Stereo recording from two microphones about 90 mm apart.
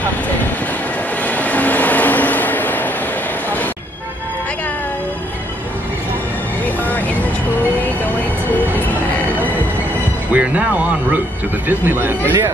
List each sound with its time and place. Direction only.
1.2 s train: 15° left (ahead or behind)
3.4 s music: 20° left (ahead or behind)
6.8 s vehicle: 20° left (ahead or behind)
10.3 s music: 15° right (ahead or behind)
11.6 s speech: 20° right (ahead or behind)